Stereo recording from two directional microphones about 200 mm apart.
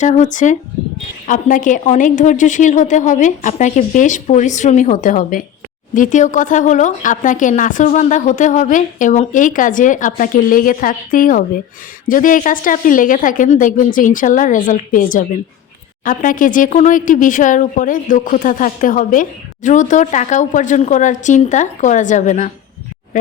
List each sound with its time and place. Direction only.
0.0 s speech: 35° left (ahead or behind)